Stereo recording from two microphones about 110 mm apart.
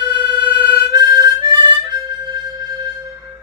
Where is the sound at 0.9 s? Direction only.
35° right (ahead or behind).